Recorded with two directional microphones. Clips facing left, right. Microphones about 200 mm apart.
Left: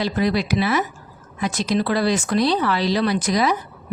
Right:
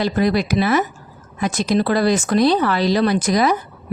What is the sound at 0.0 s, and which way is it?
A woman's voice, 50° right (ahead or behind).